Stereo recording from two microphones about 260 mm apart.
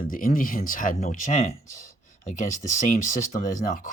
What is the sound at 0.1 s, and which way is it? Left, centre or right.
Speech, left.